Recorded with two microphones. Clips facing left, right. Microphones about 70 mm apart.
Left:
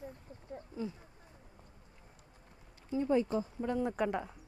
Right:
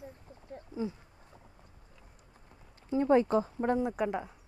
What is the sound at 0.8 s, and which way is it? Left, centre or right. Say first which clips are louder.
Speech: right 4 dB; centre.